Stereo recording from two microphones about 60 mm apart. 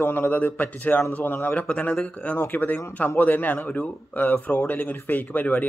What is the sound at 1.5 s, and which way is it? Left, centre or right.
A man's voice, left.